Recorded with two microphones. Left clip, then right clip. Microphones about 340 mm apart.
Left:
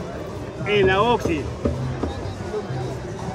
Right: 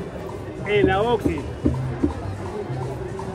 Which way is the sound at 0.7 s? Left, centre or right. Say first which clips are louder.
Left 2 dB; centre.